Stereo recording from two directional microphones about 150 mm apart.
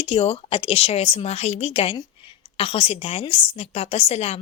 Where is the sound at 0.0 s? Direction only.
40° left (ahead or behind).